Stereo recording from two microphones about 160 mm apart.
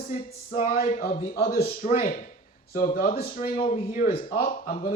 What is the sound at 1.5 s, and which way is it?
Speech, 35° left (ahead or behind).